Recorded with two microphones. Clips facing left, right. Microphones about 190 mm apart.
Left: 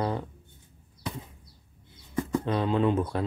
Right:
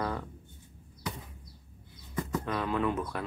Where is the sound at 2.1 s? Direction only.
25° left (ahead or behind).